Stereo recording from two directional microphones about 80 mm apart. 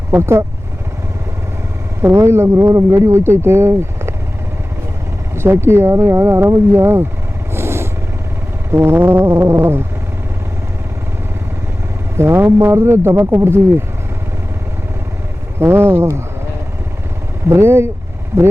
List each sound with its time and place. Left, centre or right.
0.1 s speech: right
2.0 s speech: right
5.3 s speech: right
7.5 s vehicle: right
8.7 s brass instrument: right
12.1 s speech: right
15.5 s speech: right
17.5 s speech: right